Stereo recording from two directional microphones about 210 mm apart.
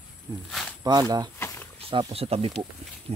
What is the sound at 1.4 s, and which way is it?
Wild animals, 10° left (ahead or behind).